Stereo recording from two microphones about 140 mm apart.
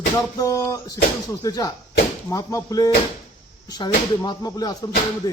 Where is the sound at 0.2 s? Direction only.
25° left (ahead or behind).